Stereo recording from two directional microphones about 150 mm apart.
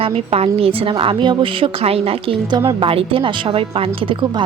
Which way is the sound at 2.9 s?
40° right (ahead or behind).